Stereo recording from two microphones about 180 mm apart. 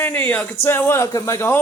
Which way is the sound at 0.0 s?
10° left (ahead or behind).